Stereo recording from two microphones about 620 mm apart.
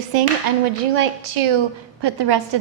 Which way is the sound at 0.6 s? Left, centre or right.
Right.